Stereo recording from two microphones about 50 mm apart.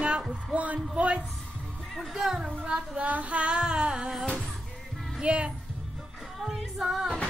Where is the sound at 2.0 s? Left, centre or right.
Centre.